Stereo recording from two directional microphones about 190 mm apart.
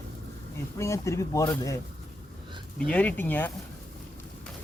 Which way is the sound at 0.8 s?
15° left (ahead or behind).